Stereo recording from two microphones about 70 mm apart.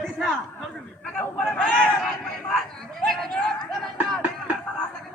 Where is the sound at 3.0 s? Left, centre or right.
Centre.